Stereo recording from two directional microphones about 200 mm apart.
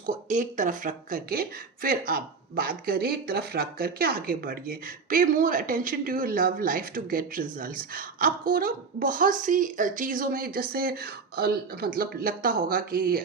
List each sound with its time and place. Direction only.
0.0 s speech: 40° right (ahead or behind)